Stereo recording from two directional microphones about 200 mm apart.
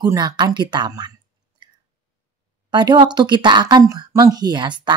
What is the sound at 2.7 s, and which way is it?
Speech, 20° right (ahead or behind).